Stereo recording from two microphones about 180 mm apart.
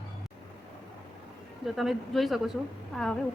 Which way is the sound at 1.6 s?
Centre (ahead or behind).